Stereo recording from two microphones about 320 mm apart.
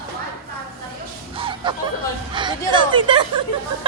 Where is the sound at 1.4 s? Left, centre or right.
Centre.